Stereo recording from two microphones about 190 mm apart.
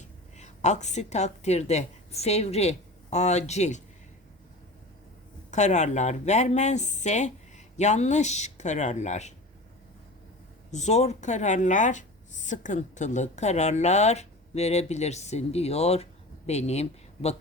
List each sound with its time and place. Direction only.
0.0 s a woman's voice: 35° left (ahead or behind)
5.5 s speech: 40° left (ahead or behind)
10.7 s speech: 35° left (ahead or behind)